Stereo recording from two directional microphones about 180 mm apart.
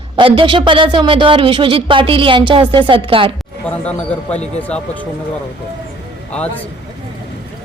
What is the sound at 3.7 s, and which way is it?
Speech, 10° left (ahead or behind).